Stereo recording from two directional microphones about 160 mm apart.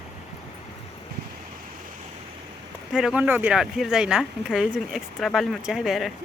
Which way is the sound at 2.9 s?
5° right (ahead or behind).